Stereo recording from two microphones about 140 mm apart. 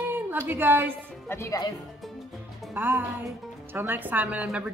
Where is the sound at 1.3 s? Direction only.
20° left (ahead or behind).